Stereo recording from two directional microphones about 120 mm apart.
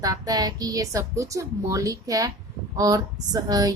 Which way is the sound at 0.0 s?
30° right (ahead or behind).